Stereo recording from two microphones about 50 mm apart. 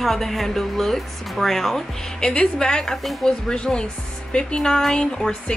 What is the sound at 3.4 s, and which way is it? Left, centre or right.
Speech, centre.